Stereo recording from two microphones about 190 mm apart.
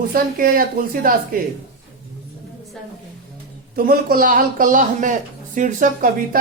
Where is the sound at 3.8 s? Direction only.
50° right (ahead or behind).